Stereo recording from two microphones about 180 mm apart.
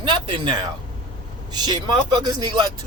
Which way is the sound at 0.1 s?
25° right (ahead or behind).